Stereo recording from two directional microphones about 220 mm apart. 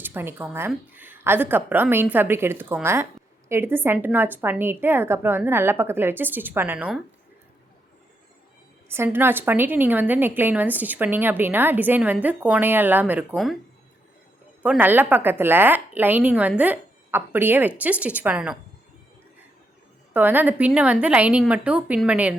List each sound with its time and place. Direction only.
0.0 s a woman's voice: 10° right (ahead or behind)
8.9 s a woman's voice: 10° right (ahead or behind)
14.6 s a woman's voice: 5° right (ahead or behind)
20.1 s a woman's voice: 10° right (ahead or behind)